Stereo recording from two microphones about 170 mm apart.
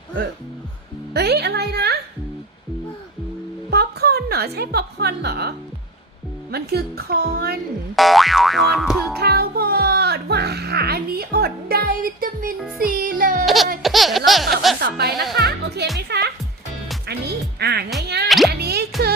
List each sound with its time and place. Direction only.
1.1 s music: 70° right (ahead or behind)
3.7 s music: 70° right (ahead or behind)
6.5 s a woman's voice: 70° right (ahead or behind)
7.9 s boing: centre (ahead or behind)
9.1 s music: 70° right (ahead or behind)
12.5 s music: 5° right (ahead or behind)
12.8 s music: 55° right (ahead or behind)
13.4 s music: centre (ahead or behind)
13.8 s a sound: centre (ahead or behind)
14.8 s speech: 65° right (ahead or behind)
15.4 s music: 75° right (ahead or behind)
18.3 s music: centre (ahead or behind)
18.6 s music: 70° right (ahead or behind)